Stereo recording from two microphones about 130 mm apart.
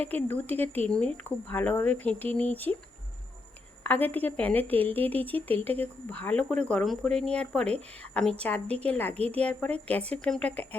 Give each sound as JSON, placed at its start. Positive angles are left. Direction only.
{"t": 0.1, "sound": "speech", "side_deg": 15}
{"t": 3.8, "sound": "speech", "side_deg": 15}